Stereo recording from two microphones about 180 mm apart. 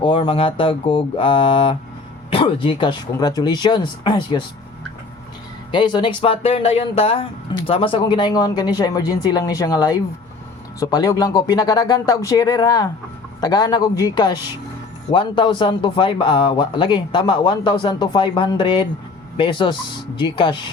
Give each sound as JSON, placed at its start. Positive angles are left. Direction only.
{"t": 0.0, "sound": "speech", "side_deg": 30}
{"t": 5.7, "sound": "speech", "side_deg": 25}